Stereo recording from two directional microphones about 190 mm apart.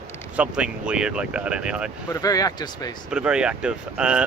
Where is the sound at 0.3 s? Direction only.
5° right (ahead or behind).